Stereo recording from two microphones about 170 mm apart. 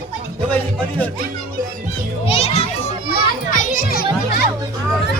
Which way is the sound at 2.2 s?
35° left (ahead or behind).